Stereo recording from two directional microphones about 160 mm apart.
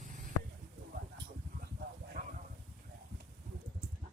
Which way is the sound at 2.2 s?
65° right (ahead or behind).